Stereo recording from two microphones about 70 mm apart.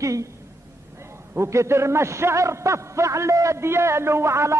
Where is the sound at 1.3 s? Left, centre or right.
Right.